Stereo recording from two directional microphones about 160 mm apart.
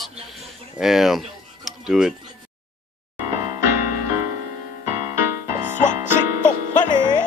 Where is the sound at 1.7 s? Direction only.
5° right (ahead or behind).